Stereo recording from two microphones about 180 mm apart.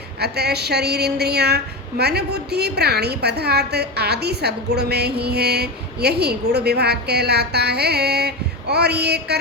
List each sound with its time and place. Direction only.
0.2 s a woman's voice: 65° right (ahead or behind)